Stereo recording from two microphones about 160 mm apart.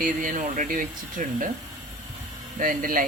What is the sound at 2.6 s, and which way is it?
Speech, 60° right (ahead or behind).